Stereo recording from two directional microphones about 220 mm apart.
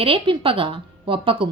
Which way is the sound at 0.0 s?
25° right (ahead or behind).